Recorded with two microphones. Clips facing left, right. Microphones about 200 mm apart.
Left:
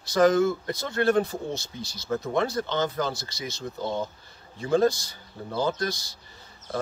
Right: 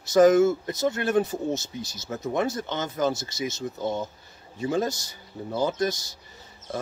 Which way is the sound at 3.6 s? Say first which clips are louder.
Left 1 dB; 45° right (ahead or behind).